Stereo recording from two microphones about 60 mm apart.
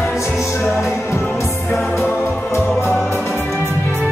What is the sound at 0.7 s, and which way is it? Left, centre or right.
Music, left.